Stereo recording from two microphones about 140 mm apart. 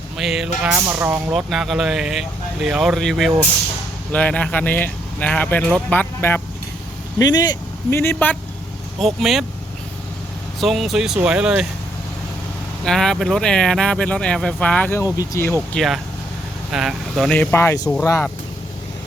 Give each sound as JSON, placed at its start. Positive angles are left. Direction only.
{"t": 0.2, "sound": "speech", "side_deg": -5}
{"t": 1.3, "sound": "speech", "side_deg": -5}
{"t": 7.2, "sound": "speech", "side_deg": 30}
{"t": 7.9, "sound": "speech", "side_deg": 15}
{"t": 9.0, "sound": "speech", "side_deg": 0}
{"t": 10.6, "sound": "speech", "side_deg": 0}
{"t": 12.8, "sound": "speech", "side_deg": 5}
{"t": 15.7, "sound": "speech", "side_deg": 0}
{"t": 17.3, "sound": "speech", "side_deg": 15}